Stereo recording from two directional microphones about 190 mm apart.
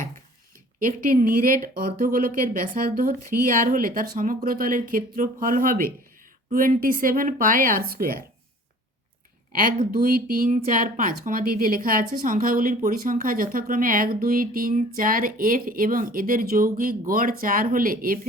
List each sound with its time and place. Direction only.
0.8 s a woman's voice: 45° right (ahead or behind)
9.6 s a woman's voice: 45° right (ahead or behind)